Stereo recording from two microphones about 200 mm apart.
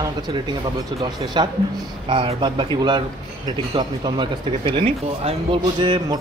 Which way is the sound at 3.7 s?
20° right (ahead or behind).